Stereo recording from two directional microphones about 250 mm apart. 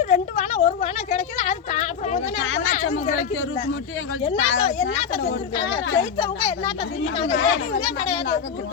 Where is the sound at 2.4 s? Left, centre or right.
Left.